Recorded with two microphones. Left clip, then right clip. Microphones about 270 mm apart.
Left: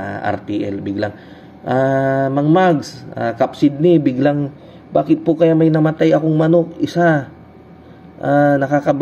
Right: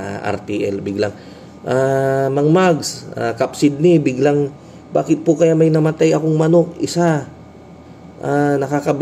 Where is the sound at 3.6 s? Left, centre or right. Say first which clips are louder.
Right 1 dB; left.